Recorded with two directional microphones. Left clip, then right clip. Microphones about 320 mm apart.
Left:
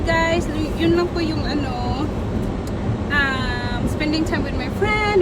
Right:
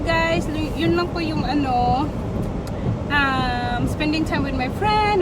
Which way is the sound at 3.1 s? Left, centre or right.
Centre.